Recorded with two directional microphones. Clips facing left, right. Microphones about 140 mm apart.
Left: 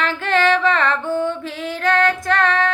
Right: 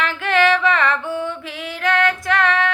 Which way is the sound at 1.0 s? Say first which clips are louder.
Left 4 dB; 45° left (ahead or behind).